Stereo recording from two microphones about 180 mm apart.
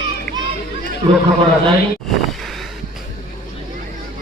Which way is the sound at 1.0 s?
25° right (ahead or behind).